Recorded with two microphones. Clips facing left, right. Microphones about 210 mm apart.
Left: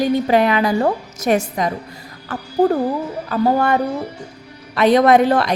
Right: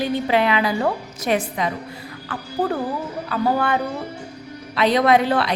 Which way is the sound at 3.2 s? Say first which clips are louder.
Left 4 dB; 40° left (ahead or behind).